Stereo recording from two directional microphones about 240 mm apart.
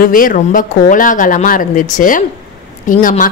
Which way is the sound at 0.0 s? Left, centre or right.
Left.